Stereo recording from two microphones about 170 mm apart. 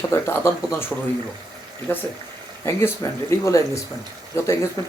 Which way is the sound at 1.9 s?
10° left (ahead or behind).